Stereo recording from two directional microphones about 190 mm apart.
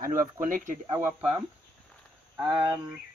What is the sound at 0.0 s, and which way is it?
Speech, 45° right (ahead or behind).